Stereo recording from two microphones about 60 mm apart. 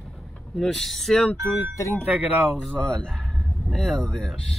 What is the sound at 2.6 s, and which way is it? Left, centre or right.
Speech, centre.